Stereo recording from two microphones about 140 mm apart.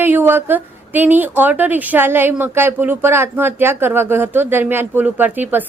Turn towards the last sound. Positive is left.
turn(degrees=-15)  # may be behind; listen again after turning